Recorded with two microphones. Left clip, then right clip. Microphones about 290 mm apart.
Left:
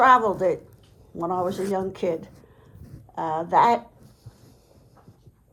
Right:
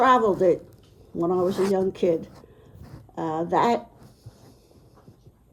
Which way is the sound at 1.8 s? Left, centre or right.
Centre.